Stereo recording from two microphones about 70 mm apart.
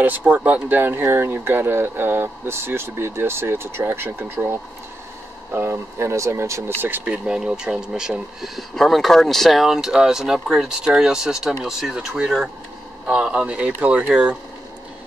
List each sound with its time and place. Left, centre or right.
0.0 s speech: right
6.8 s speech: right
7.2 s speech: centre
13.5 s speech: centre